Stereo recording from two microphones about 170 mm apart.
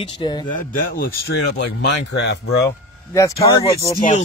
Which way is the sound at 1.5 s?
90° left.